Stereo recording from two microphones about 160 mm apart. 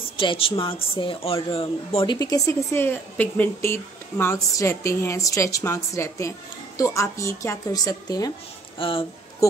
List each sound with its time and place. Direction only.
0.2 s a woman's voice: 35° left (ahead or behind)
8.7 s speech: 35° left (ahead or behind)